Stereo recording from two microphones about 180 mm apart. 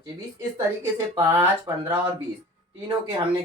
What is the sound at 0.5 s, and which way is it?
Speech, 15° right (ahead or behind).